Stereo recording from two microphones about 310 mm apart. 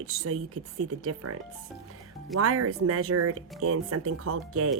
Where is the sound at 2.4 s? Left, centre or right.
Right.